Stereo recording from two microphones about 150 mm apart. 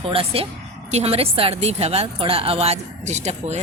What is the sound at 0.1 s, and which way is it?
Speech, 40° right (ahead or behind).